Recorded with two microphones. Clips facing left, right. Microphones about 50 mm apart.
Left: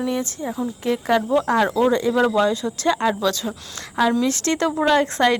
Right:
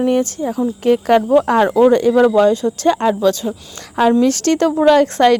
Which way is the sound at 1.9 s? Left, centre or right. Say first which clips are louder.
Right 7 dB; right.